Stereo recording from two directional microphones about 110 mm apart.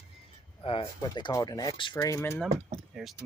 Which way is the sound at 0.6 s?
55° left (ahead or behind).